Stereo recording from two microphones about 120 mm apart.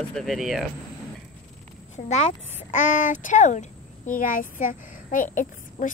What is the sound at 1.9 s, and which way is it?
Speech, 70° left (ahead or behind).